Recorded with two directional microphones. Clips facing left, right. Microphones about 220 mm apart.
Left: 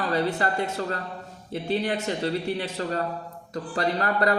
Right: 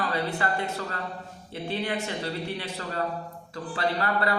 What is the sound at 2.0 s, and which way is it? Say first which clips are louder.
A woman's voice: left 5 dB; 40° left (ahead or behind).